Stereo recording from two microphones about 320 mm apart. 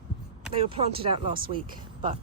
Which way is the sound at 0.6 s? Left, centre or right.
Centre.